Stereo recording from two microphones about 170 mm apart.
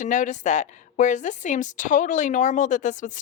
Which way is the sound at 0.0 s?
45° left (ahead or behind).